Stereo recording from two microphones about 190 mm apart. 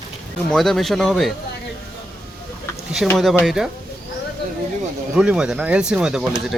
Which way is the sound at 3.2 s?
Centre (ahead or behind).